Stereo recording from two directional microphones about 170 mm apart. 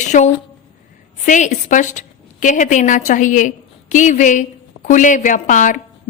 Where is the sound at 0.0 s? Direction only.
45° left (ahead or behind).